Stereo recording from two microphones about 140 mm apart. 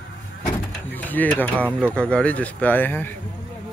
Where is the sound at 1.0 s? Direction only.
10° left (ahead or behind).